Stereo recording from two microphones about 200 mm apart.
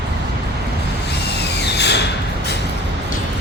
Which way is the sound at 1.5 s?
55° left (ahead or behind).